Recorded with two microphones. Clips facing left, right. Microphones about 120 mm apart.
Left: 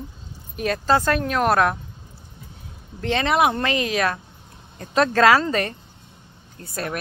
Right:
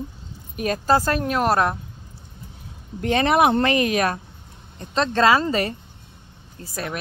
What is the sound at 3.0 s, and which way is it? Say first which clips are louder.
Speech: right 2 dB; 50° right (ahead or behind).